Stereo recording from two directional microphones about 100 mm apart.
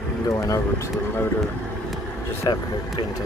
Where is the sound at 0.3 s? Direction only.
35° left (ahead or behind).